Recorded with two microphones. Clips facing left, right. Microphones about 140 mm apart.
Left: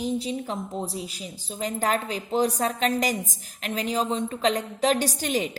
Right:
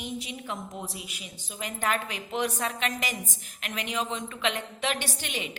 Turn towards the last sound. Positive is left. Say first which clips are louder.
# left 9 dB
turn(degrees=40)  # may be behind; listen again after turning